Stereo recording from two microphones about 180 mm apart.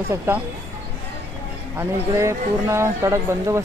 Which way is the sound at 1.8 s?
15° right (ahead or behind).